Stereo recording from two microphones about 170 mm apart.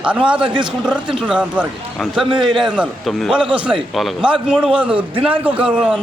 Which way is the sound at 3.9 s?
5° right (ahead or behind).